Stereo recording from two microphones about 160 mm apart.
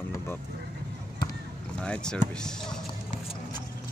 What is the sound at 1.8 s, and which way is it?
Speech, 5° left (ahead or behind).